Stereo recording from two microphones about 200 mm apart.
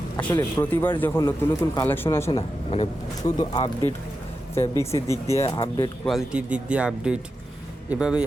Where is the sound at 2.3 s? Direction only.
30° left (ahead or behind).